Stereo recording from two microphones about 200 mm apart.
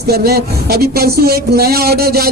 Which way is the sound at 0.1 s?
50° right (ahead or behind).